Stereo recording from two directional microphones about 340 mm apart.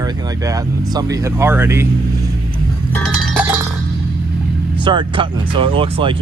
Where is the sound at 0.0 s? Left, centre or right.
Centre.